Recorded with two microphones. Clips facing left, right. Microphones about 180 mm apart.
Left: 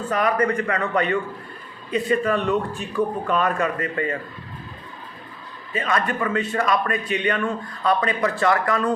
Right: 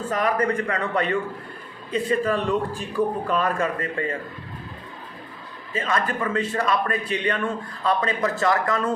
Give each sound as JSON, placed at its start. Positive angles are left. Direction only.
{"t": 0.1, "sound": "a man's voice", "side_deg": -30}
{"t": 5.7, "sound": "a man's voice", "side_deg": -30}